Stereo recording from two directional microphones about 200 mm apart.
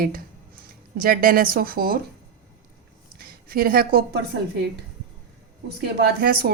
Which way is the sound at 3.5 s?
50° right (ahead or behind).